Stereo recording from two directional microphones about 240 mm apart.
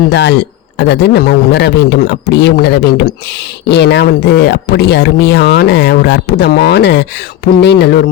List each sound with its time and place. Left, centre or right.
0.1 s speech: left